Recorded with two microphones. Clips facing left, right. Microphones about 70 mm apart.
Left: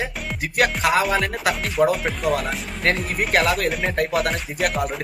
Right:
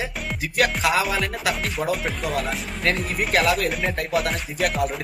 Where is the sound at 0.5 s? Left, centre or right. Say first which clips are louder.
Left 2 dB; left.